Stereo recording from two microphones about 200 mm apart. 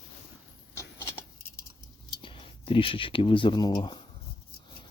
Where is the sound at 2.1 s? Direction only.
25° left (ahead or behind).